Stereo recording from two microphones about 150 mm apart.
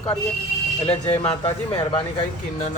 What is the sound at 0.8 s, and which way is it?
Speech, 40° left (ahead or behind).